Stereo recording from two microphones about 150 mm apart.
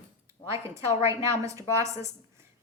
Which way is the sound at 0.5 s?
20° right (ahead or behind).